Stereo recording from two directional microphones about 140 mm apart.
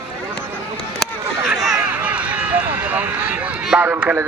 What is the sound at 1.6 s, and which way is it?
Speech, 5° right (ahead or behind).